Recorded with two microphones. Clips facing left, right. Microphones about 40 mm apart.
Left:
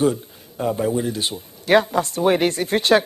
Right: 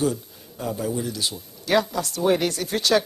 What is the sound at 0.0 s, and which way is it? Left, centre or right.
Speech, left.